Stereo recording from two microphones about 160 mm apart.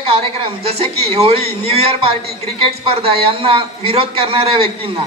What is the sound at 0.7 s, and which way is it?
Music, 40° right (ahead or behind).